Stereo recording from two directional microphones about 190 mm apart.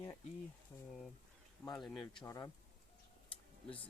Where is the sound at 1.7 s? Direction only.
Centre (ahead or behind).